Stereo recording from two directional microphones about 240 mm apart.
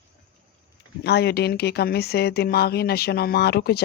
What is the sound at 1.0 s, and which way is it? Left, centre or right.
Speech, left.